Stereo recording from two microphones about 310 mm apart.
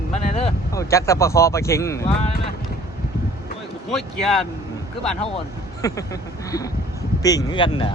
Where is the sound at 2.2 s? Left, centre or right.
Left.